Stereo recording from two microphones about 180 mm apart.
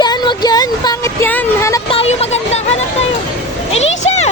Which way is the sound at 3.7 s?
35° left (ahead or behind).